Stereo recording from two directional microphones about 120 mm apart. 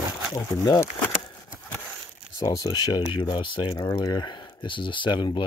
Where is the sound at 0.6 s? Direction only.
25° left (ahead or behind).